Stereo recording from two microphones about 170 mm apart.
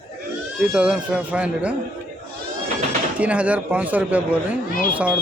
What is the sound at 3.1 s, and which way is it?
Speech, 5° right (ahead or behind).